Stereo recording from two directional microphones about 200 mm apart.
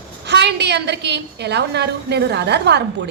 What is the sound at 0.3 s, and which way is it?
A woman's voice, 55° right (ahead or behind).